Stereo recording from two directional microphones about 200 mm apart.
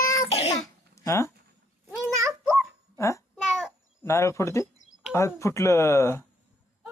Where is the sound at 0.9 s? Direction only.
15° left (ahead or behind).